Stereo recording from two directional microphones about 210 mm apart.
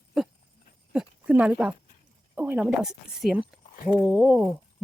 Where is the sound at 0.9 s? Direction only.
5° right (ahead or behind).